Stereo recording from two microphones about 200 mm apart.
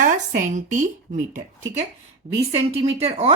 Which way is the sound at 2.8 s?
30° right (ahead or behind).